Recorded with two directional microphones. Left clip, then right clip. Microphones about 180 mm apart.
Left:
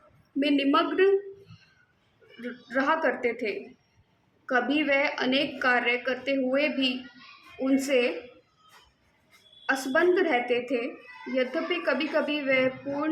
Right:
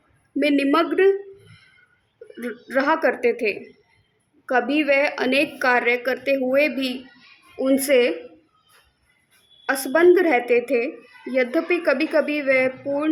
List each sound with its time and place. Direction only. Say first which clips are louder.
0.3 s a woman's voice: right 5 dB; 35° right (ahead or behind)
2.4 s a woman's voice: right 6 dB; 40° right (ahead or behind)
9.6 s a woman's voice: right 7 dB; 35° right (ahead or behind)